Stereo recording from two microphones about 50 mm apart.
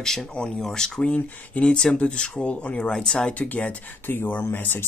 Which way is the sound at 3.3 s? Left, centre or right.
Left.